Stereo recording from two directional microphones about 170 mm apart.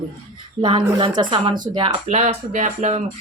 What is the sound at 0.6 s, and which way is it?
Speech, 30° right (ahead or behind).